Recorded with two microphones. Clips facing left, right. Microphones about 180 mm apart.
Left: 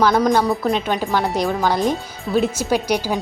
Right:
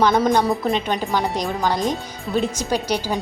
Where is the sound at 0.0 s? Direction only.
Centre (ahead or behind).